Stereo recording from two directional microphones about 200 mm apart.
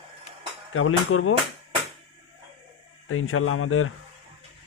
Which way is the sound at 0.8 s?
90° left.